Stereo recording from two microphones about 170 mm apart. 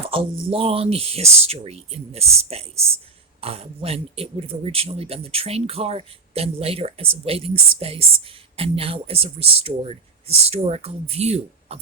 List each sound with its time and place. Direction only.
0.1 s speech: 30° right (ahead or behind)